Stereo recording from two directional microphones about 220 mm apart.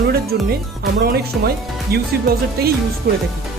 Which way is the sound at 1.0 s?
45° right (ahead or behind).